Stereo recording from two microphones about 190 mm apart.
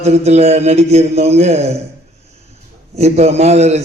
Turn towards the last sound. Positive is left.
turn(degrees=-35)  # may be behind; listen again after turning